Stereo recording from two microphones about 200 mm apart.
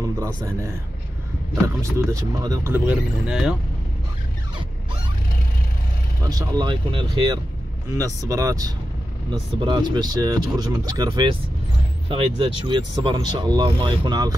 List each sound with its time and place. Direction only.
0.0 s speech: 15° right (ahead or behind)
1.8 s speech: 15° right (ahead or behind)
6.2 s speech: 20° right (ahead or behind)